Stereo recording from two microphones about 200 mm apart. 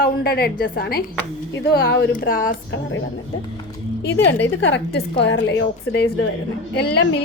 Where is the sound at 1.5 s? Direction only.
60° left (ahead or behind).